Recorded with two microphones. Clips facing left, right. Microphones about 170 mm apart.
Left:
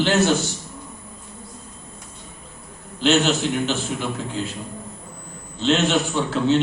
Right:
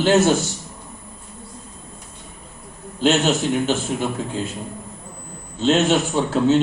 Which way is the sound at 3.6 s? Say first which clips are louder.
Right 3 dB; 45° right (ahead or behind).